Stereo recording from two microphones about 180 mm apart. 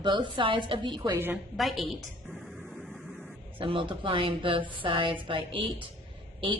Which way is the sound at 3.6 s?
30° right (ahead or behind).